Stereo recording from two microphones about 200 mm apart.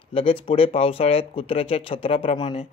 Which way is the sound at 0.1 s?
25° left (ahead or behind).